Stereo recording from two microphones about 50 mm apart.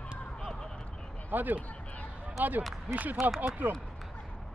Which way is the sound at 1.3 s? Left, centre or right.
Right.